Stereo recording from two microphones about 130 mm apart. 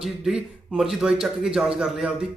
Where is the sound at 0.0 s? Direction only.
5° right (ahead or behind).